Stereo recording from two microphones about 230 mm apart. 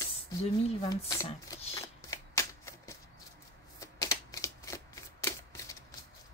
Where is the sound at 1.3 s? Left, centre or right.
Left.